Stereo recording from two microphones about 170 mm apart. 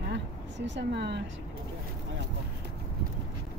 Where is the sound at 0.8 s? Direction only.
90° right.